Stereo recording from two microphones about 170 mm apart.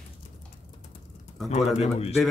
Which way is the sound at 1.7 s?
35° left (ahead or behind).